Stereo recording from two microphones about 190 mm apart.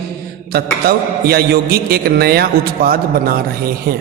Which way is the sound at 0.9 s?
55° right (ahead or behind).